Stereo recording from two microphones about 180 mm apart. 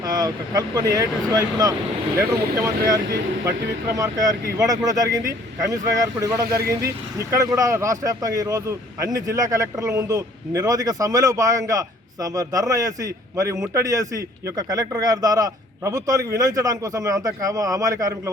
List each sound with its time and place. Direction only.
0.0 s speech: 20° right (ahead or behind)